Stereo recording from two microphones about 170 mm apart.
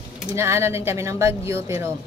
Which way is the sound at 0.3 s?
15° right (ahead or behind).